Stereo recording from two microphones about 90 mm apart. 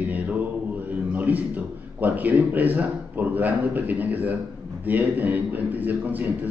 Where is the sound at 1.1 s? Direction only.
15° right (ahead or behind).